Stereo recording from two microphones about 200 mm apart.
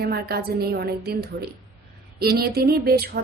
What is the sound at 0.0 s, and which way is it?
A woman's voice, 50° right (ahead or behind).